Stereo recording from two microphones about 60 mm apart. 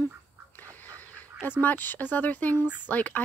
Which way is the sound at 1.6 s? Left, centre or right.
Left.